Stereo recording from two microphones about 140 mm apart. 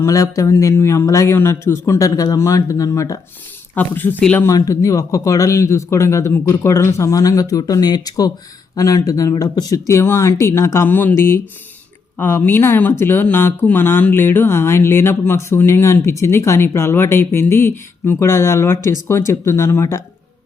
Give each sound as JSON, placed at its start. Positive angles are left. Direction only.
{"t": 0.0, "sound": "a man's voice", "side_deg": 25}
{"t": 4.4, "sound": "a man's voice", "side_deg": 25}